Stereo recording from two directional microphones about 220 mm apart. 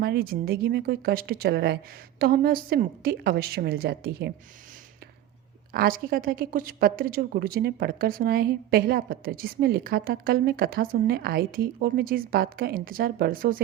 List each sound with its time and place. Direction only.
0.0 s speech: 45° right (ahead or behind)
5.7 s speech: 40° right (ahead or behind)